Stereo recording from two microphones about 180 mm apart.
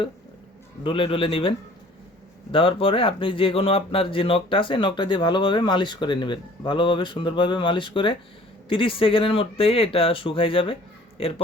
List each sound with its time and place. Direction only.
0.9 s a man's voice: 30° left (ahead or behind)